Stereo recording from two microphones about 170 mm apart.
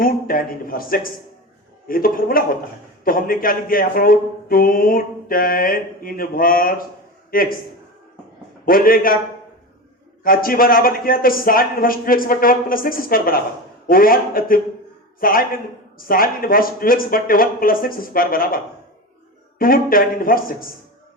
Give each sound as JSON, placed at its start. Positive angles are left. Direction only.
{"t": 0.0, "sound": "speech", "side_deg": 60}
{"t": 8.6, "sound": "speech", "side_deg": 55}
{"t": 10.2, "sound": "speech", "side_deg": 60}